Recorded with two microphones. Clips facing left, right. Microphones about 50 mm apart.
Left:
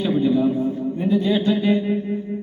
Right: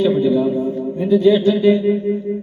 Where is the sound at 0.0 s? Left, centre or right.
Centre.